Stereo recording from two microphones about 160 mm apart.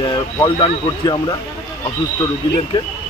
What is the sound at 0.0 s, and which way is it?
A man's voice, 30° left (ahead or behind).